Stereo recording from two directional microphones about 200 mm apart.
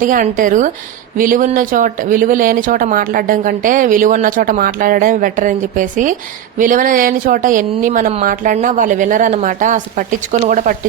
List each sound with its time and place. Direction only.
0.0 s speech: 40° right (ahead or behind)